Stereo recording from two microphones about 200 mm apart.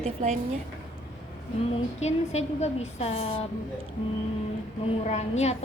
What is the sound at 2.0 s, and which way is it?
A woman's voice, 35° left (ahead or behind).